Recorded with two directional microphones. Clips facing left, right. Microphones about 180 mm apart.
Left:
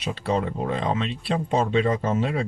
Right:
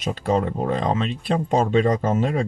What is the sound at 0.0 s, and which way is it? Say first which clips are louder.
Speech: right 3 dB; 45° right (ahead or behind).